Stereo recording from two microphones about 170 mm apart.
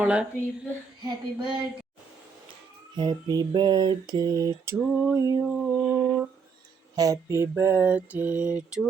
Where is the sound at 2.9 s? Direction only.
25° right (ahead or behind).